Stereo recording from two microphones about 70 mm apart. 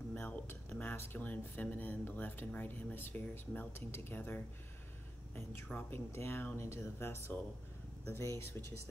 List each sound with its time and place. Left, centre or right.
0.1 s speech: left